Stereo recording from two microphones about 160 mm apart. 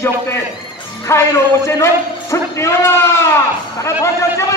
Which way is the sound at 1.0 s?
15° left (ahead or behind).